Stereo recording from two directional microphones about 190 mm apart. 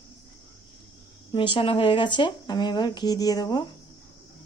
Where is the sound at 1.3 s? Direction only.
25° left (ahead or behind).